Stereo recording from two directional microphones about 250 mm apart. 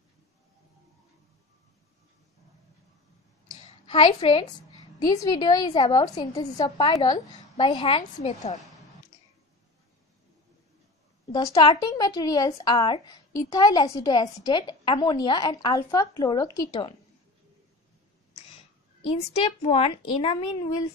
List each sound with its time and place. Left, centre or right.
3.4 s a sound: left
5.0 s speech: centre
11.3 s speech: centre
19.1 s a woman's voice: left